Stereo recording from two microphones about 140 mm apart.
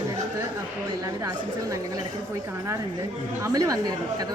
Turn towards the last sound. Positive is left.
turn(degrees=-25)  # may be behind; listen again after turning